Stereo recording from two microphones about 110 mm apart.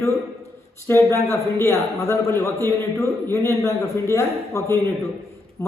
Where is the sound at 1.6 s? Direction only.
25° left (ahead or behind).